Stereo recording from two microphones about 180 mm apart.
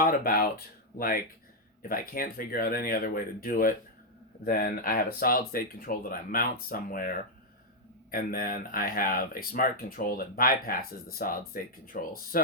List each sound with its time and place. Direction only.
0.0 s speech: 55° left (ahead or behind)